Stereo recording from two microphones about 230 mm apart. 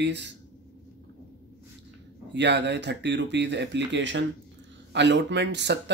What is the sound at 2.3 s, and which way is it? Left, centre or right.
Speech, right.